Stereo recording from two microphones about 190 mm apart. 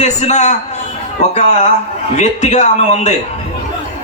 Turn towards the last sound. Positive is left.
turn(degrees=40)  # may be behind; listen again after turning